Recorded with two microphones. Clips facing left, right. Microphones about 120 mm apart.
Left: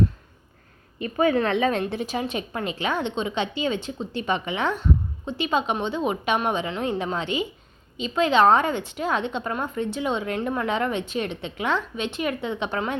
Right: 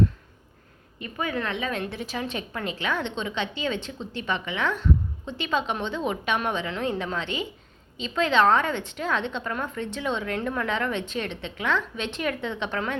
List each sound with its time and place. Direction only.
1.0 s speech: 35° left (ahead or behind)
2.0 s a woman's voice: 20° left (ahead or behind)
9.4 s a woman's voice: 25° left (ahead or behind)
9.7 s a woman's voice: 10° left (ahead or behind)